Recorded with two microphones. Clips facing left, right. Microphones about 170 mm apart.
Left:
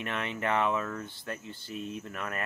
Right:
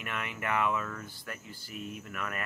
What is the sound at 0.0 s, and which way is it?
Speech, 30° left (ahead or behind).